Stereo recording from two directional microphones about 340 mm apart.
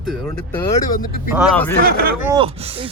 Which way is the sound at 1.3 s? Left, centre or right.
Centre.